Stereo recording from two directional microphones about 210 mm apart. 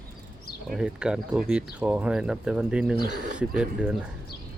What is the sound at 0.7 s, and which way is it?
Speech, 5° right (ahead or behind).